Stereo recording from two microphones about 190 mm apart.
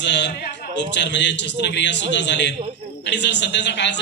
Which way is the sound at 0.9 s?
65° left (ahead or behind).